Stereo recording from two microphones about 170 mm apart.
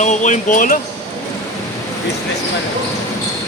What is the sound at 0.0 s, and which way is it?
Speech, 45° left (ahead or behind).